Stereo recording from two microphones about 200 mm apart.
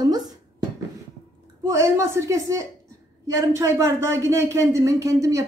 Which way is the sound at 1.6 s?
15° right (ahead or behind).